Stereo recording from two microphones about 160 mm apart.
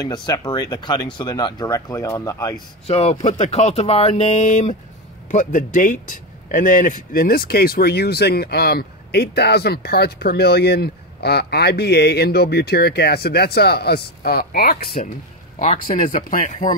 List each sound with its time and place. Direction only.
0.0 s speech: 25° left (ahead or behind)
2.9 s speech: 40° left (ahead or behind); by 14.9 s 70° left (ahead or behind)
15.6 s speech: 50° left (ahead or behind)